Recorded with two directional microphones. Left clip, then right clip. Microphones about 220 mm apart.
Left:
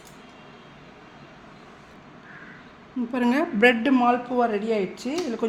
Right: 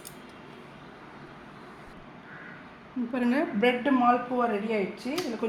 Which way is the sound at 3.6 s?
45° left (ahead or behind).